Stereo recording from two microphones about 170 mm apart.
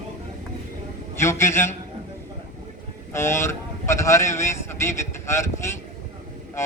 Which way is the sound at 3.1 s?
15° left (ahead or behind).